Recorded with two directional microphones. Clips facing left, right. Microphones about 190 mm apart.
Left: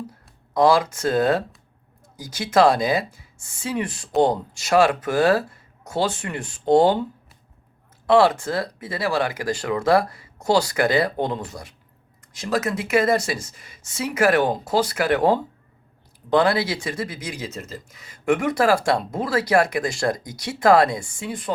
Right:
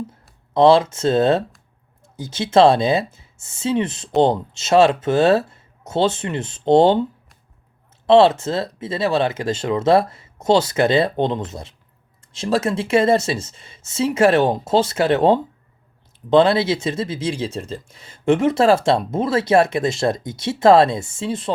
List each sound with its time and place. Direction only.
0.5 s speech: 25° right (ahead or behind)
8.0 s speech: 25° right (ahead or behind)